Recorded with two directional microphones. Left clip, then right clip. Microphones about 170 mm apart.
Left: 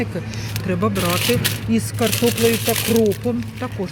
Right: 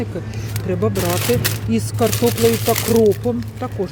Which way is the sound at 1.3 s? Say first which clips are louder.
Right 1 dB; 20° right (ahead or behind).